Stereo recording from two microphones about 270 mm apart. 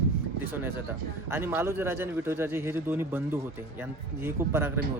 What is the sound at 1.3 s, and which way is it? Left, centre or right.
Speech, centre.